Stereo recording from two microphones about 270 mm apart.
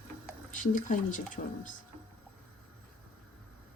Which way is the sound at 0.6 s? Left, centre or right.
Left.